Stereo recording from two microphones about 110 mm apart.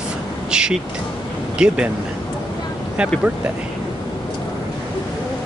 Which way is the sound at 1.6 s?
10° right (ahead or behind).